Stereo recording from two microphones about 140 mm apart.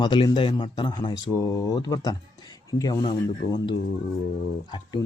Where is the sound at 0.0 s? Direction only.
35° left (ahead or behind).